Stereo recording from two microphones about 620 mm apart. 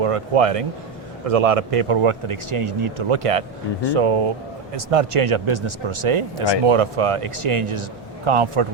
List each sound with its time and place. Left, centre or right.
0.0 s speech: right